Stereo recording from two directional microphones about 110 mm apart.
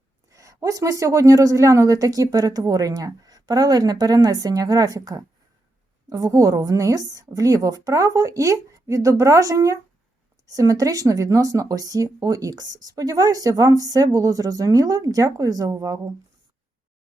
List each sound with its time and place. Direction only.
0.3 s speech: 30° right (ahead or behind)